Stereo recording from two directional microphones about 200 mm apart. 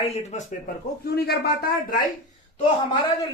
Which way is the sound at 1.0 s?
55° left (ahead or behind).